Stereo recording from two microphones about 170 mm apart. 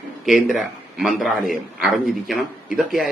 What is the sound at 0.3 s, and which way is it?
A man's voice, centre (ahead or behind).